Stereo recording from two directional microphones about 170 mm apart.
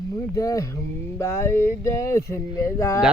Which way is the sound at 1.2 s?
15° left (ahead or behind).